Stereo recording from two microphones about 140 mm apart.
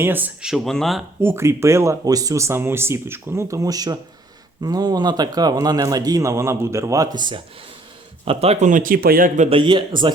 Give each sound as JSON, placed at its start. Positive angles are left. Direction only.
{"t": 0.0, "sound": "speech", "side_deg": -15}
{"t": 1.2, "sound": "a man's voice", "side_deg": -20}
{"t": 8.2, "sound": "speech", "side_deg": -45}
{"t": 8.7, "sound": "a man's voice", "side_deg": -80}
{"t": 9.5, "sound": "a man's voice", "side_deg": -35}